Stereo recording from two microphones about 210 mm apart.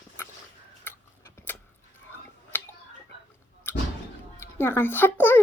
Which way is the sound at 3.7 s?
10° left (ahead or behind).